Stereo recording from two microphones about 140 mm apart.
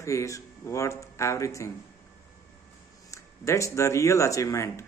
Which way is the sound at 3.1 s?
20° left (ahead or behind).